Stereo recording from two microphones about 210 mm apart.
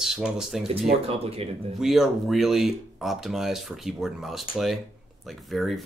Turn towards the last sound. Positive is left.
turn(degrees=0)  # may be behind; listen again after turning